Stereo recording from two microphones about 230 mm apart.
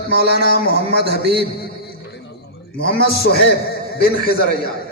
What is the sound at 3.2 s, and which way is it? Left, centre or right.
A man's voice, left.